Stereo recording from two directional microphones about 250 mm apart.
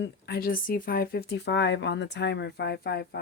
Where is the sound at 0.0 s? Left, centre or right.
Left.